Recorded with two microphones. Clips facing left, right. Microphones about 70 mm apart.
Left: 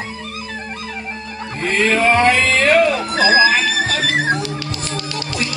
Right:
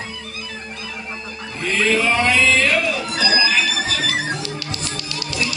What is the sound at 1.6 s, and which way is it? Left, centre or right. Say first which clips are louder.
Music: left 3 dB; left.